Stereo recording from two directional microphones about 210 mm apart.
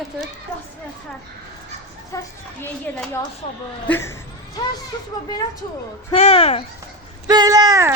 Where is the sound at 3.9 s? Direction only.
10° left (ahead or behind).